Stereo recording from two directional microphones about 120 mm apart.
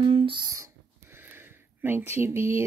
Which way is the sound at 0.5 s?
25° right (ahead or behind).